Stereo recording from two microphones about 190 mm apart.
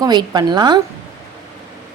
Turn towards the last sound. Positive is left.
turn(degrees=-25)  # may be behind; listen again after turning